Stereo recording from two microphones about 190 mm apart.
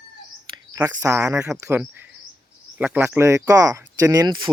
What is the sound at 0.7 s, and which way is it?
Speech, 15° right (ahead or behind).